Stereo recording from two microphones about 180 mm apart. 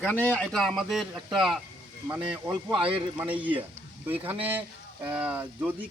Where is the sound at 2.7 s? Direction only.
30° right (ahead or behind).